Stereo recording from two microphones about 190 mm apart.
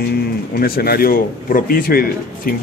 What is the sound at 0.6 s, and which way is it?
A man's voice, 55° left (ahead or behind).